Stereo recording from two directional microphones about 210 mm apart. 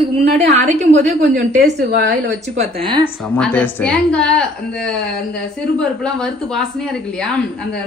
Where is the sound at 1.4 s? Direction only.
50° right (ahead or behind).